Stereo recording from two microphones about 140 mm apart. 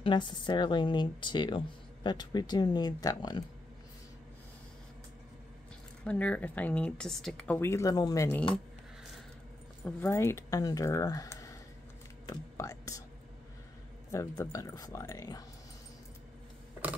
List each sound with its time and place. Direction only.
0.0 s speech: 35° left (ahead or behind)
6.0 s speech: 10° left (ahead or behind)
9.8 s speech: 15° left (ahead or behind)
14.1 s speech: 20° left (ahead or behind)